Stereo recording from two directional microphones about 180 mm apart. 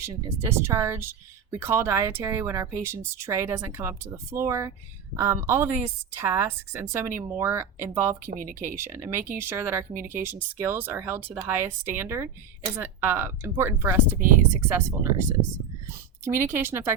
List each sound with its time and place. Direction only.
0.0 s speech: 15° right (ahead or behind)
14.2 s speech: 50° right (ahead or behind)
14.7 s speech: 15° right (ahead or behind)